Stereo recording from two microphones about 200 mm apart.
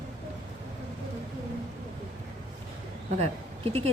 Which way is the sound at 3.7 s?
30° right (ahead or behind).